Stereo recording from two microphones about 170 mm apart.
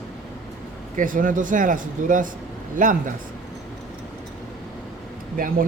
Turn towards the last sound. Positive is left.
turn(degrees=-55)  # may be behind; listen again after turning